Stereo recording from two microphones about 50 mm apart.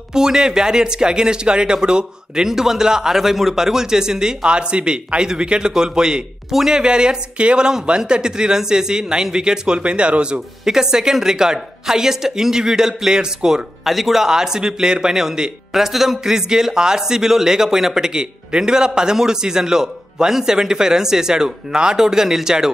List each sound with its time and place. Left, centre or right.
0.1 s a man's voice: centre
10.6 s a man's voice: centre
13.8 s a man's voice: centre